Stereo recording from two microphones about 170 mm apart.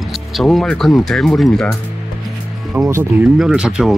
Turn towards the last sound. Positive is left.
turn(degrees=-5)  # may be behind; listen again after turning